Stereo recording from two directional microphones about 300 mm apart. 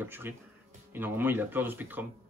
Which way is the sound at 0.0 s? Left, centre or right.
Centre.